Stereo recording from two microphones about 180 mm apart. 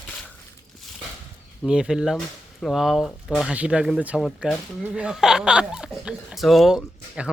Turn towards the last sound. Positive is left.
turn(degrees=0)  # may be behind; listen again after turning